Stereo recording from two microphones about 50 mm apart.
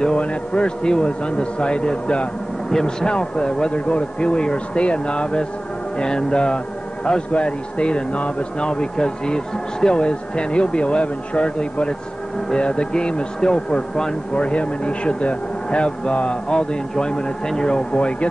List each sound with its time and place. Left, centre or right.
0.0 s speech: left